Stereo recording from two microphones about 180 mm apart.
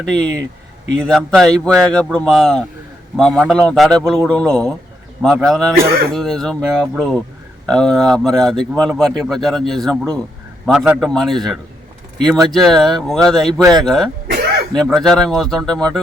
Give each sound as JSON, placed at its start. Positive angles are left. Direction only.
{"t": 0.0, "sound": "speech", "side_deg": 5}
{"t": 5.7, "sound": "speech", "side_deg": -55}
{"t": 6.1, "sound": "speech", "side_deg": 0}
{"t": 14.3, "sound": "throat clearing", "side_deg": -60}
{"t": 14.8, "sound": "speech", "side_deg": 0}